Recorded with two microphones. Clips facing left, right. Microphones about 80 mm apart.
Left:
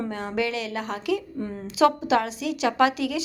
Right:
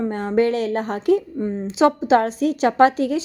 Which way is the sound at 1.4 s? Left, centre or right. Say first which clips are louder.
Right 3 dB; right.